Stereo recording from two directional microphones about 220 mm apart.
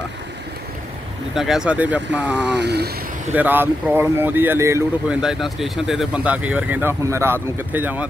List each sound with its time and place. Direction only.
1.3 s speech: centre (ahead or behind)
2.6 s speech: 50° right (ahead or behind)
3.3 s speech: 10° right (ahead or behind)
5.2 s speech: centre (ahead or behind)